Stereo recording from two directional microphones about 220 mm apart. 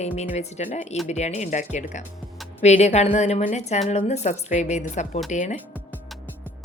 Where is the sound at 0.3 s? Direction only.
35° left (ahead or behind).